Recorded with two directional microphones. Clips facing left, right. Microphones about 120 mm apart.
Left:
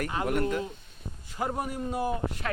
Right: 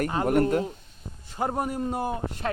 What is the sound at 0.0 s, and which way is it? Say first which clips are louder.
Speech: right 6 dB; 40° right (ahead or behind).